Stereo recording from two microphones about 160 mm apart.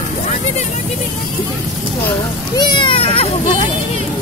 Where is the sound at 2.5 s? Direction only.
25° left (ahead or behind).